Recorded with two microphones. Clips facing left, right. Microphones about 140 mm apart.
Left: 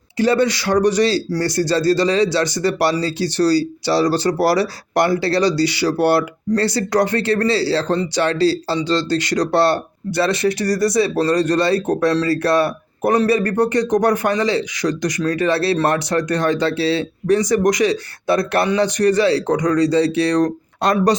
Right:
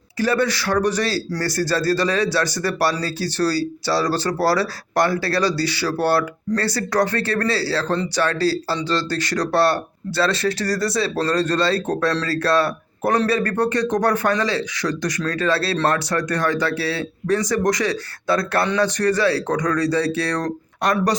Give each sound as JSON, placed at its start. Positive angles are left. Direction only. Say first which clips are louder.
{"t": 0.2, "sound": "speech", "louder": "left 4 dB", "side_deg": 20}